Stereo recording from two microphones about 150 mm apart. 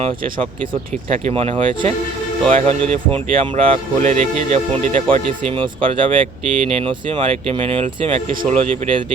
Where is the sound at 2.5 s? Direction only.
50° right (ahead or behind).